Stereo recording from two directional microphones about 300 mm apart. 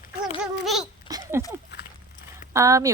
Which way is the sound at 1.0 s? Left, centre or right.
Centre.